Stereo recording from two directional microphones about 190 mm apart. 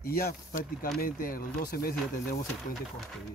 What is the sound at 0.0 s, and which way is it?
Speech, 50° left (ahead or behind).